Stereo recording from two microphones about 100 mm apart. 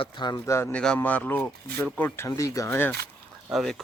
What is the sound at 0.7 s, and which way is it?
Speech, 10° left (ahead or behind).